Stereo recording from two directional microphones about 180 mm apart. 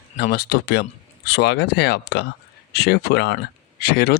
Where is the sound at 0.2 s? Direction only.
60° left (ahead or behind).